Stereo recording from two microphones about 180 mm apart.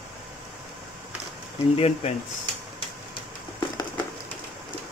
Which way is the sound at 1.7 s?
35° left (ahead or behind).